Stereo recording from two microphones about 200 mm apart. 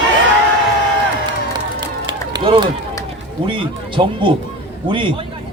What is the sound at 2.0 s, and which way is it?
Run, 25° right (ahead or behind).